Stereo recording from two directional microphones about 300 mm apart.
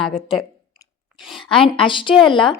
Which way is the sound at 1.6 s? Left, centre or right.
Centre.